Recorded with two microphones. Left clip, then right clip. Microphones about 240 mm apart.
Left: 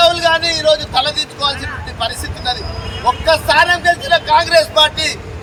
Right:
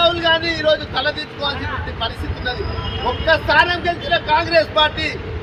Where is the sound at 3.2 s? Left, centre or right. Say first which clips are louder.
Left 2 dB; centre.